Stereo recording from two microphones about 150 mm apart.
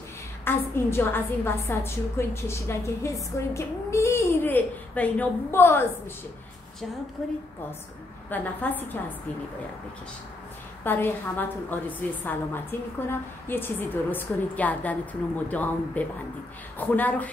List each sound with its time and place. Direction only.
0.5 s a woman's voice: 15° left (ahead or behind)
8.3 s a woman's voice: 10° left (ahead or behind)
10.8 s a woman's voice: 15° left (ahead or behind)